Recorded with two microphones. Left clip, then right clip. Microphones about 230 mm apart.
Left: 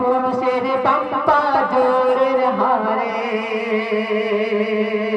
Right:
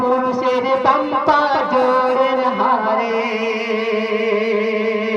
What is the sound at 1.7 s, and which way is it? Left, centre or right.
Music, left.